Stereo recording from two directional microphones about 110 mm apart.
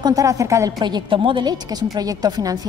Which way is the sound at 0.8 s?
45° right (ahead or behind).